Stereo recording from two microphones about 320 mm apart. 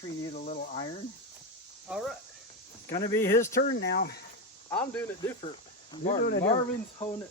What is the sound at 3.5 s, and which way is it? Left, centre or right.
Speech, left.